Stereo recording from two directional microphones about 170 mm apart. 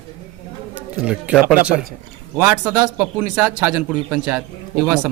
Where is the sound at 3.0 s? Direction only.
5° right (ahead or behind).